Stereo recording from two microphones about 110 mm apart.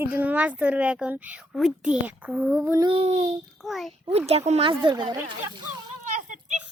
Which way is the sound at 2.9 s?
65° right (ahead or behind).